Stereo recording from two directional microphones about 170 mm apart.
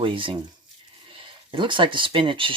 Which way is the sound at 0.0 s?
30° right (ahead or behind).